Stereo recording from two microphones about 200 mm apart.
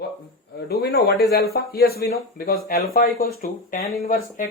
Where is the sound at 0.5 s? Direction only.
50° left (ahead or behind).